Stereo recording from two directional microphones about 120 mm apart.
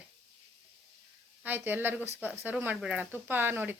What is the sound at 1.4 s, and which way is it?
Speech, 15° right (ahead or behind).